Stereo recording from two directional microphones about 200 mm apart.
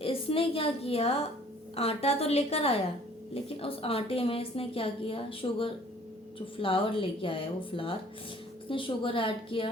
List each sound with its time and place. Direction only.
0.0 s a woman's voice: 30° left (ahead or behind)